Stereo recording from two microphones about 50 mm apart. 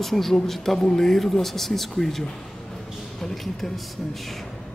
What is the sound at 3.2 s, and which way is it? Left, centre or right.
Speech, centre.